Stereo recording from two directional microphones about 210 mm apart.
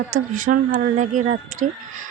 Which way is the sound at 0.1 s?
40° right (ahead or behind).